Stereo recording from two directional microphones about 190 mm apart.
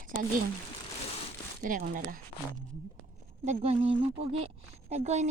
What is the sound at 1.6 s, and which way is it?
Speech, 45° right (ahead or behind).